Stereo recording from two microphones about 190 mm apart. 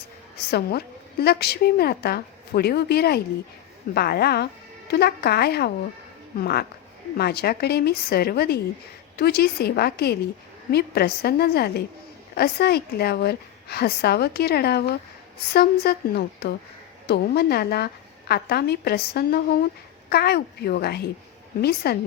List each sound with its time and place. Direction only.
0.3 s a woman's voice: 55° left (ahead or behind)